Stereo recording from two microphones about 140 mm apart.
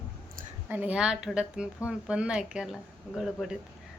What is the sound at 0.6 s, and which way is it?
A woman's voice, 10° right (ahead or behind).